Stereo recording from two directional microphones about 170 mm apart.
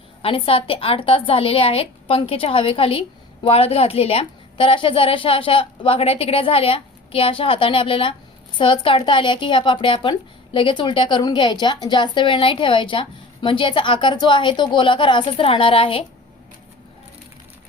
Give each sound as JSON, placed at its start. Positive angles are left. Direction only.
{"t": 0.2, "sound": "a woman's voice", "side_deg": 35}